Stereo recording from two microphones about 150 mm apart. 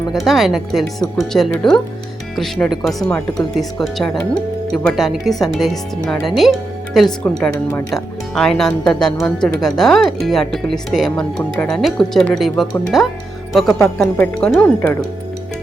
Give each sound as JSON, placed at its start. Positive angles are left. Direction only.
{"t": 0.1, "sound": "speech", "side_deg": 0}
{"t": 7.5, "sound": "speech", "side_deg": 15}
{"t": 7.9, "sound": "speech", "side_deg": 5}